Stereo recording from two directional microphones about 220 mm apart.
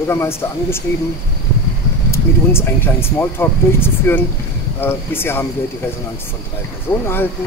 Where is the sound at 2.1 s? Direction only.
10° left (ahead or behind).